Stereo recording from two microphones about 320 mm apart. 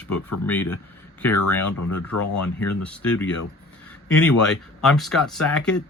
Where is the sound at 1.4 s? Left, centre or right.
Left.